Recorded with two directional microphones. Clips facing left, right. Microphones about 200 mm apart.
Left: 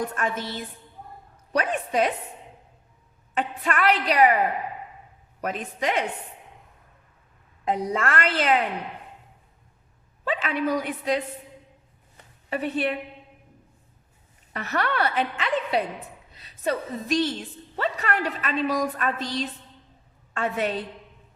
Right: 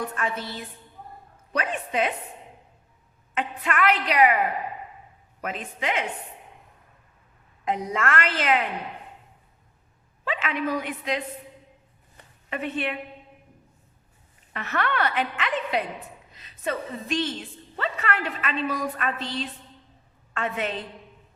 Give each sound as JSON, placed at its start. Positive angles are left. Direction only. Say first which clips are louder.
{"t": 1.5, "sound": "a woman's voice", "louder": "left 3 dB", "side_deg": 40}
{"t": 3.3, "sound": "a woman's voice", "louder": "left 1 dB", "side_deg": 35}
{"t": 5.4, "sound": "a woman's voice", "louder": "left 3 dB", "side_deg": 40}
{"t": 7.6, "sound": "a woman's voice", "louder": "left 2 dB", "side_deg": 35}
{"t": 10.2, "sound": "a woman's voice", "louder": "left 2 dB", "side_deg": 35}
{"t": 12.5, "sound": "a woman's voice", "louder": "left 3 dB", "side_deg": 40}
{"t": 14.5, "sound": "a woman's voice", "louder": "left 1 dB", "side_deg": 40}